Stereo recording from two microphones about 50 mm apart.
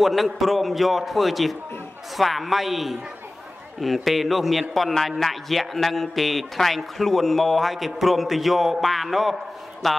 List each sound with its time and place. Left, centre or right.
0.0 s a man's voice: centre